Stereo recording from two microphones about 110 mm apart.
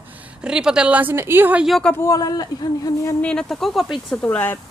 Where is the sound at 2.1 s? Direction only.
35° left (ahead or behind).